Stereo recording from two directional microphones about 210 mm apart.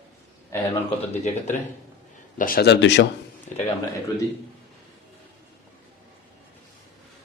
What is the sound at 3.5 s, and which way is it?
Speech, 35° left (ahead or behind).